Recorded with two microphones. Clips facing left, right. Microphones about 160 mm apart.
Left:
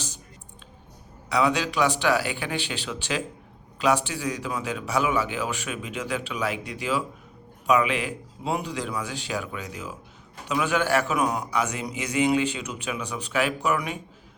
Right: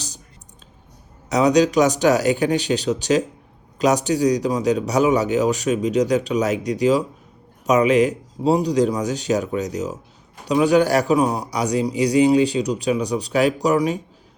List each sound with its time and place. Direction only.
1.3 s a man's voice: 40° right (ahead or behind)